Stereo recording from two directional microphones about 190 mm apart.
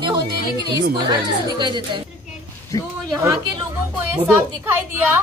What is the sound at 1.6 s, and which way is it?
Speech, 25° right (ahead or behind).